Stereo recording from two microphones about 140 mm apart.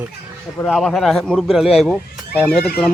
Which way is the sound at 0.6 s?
Centre (ahead or behind).